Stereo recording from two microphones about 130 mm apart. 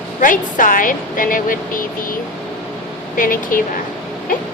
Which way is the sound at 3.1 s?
90° left.